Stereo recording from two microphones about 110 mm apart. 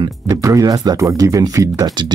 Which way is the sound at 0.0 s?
35° right (ahead or behind).